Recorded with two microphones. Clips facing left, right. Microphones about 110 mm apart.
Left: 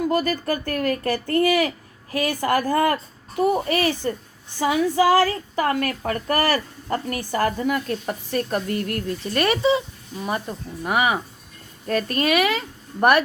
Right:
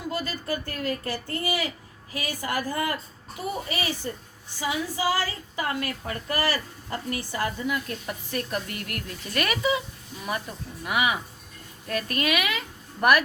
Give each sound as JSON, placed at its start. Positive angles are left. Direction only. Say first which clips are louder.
{"t": 0.0, "sound": "a woman's voice", "louder": "left 10 dB", "side_deg": 55}